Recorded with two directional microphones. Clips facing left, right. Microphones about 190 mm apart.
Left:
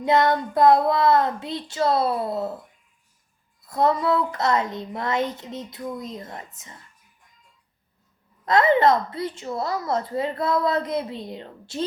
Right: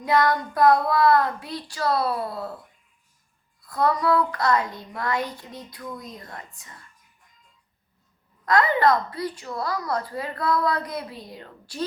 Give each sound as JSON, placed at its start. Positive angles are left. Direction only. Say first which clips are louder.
{"t": 0.0, "sound": "a woman's voice", "louder": "left 2 dB", "side_deg": 25}
{"t": 3.6, "sound": "a woman's voice", "louder": "left 2 dB", "side_deg": 25}
{"t": 8.4, "sound": "a woman's voice", "louder": "left 2 dB", "side_deg": 25}